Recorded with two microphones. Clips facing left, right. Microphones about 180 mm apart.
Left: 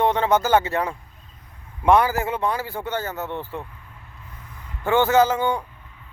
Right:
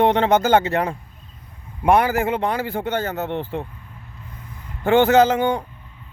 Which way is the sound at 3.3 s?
30° right (ahead or behind).